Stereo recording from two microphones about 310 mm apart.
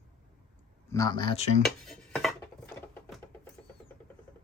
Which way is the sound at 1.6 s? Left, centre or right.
Centre.